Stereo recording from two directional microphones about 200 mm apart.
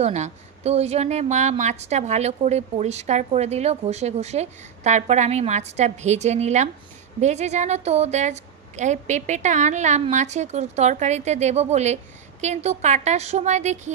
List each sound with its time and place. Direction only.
0.0 s a woman's voice: 35° right (ahead or behind)